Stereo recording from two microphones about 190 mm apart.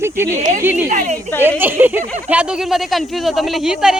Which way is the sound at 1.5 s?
10° right (ahead or behind).